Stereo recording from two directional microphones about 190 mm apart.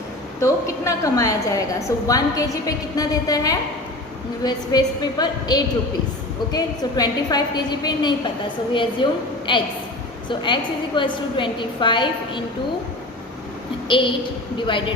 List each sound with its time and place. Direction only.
0.3 s a woman's voice: 15° left (ahead or behind)
13.8 s a woman's voice: 25° left (ahead or behind)